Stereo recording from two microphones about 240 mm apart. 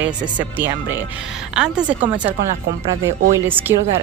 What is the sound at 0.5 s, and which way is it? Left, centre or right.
A woman's voice, centre.